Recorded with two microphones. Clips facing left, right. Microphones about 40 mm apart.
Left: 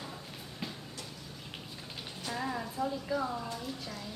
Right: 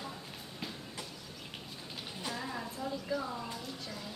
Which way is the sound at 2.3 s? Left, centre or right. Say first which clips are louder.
Left 7 dB; centre.